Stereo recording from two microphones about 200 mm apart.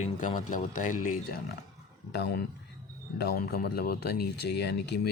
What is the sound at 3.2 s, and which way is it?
Speech, 50° left (ahead or behind).